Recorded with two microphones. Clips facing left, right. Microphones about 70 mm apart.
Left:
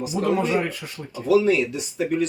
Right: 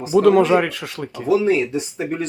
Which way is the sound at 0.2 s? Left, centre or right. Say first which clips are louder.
Right 9 dB; right.